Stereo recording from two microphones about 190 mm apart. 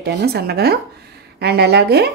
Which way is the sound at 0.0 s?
60° right (ahead or behind).